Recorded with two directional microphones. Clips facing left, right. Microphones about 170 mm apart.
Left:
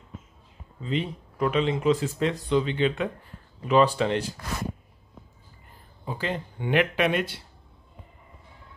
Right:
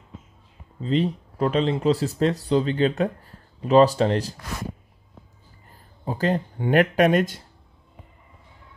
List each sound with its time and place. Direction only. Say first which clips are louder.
0.7 s speech: right 6 dB; 35° right (ahead or behind)
6.0 s speech: right 7 dB; 40° right (ahead or behind)